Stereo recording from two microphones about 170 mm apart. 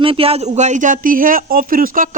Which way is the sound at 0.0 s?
35° right (ahead or behind).